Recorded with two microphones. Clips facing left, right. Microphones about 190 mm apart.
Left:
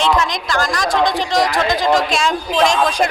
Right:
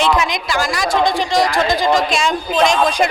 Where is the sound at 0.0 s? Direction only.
10° right (ahead or behind).